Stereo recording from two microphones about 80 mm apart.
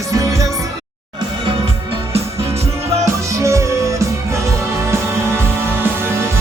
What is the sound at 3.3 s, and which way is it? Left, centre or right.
Music, right.